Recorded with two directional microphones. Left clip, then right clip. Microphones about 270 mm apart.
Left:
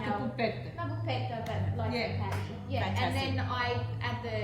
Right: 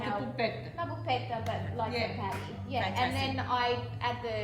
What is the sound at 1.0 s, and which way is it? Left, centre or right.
A woman's voice, centre.